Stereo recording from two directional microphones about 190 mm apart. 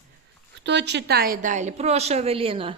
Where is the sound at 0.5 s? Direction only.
65° right (ahead or behind); by 2.7 s 30° right (ahead or behind).